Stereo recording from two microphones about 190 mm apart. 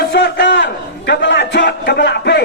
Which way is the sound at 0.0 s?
60° left (ahead or behind).